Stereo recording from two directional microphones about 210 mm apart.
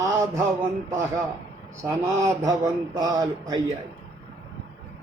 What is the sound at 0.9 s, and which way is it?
Speech, 15° right (ahead or behind).